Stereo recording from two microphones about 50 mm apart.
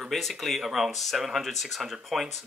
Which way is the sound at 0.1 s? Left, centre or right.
Centre.